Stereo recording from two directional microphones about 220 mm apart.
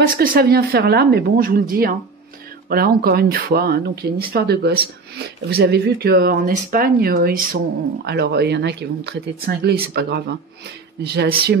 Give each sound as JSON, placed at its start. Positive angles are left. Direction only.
{"t": 0.1, "sound": "speech", "side_deg": -40}